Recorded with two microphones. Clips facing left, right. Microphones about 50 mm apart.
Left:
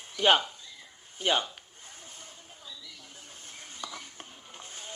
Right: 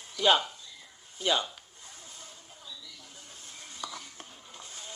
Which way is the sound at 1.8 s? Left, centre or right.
Left.